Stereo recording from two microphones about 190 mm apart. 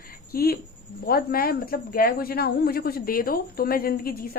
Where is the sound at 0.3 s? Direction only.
55° left (ahead or behind).